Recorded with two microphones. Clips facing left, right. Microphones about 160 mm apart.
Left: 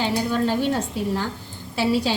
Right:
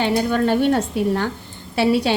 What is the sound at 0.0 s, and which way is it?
A woman's voice, 60° right (ahead or behind).